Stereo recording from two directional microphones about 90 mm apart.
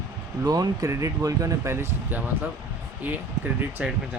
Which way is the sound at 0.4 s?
45° right (ahead or behind).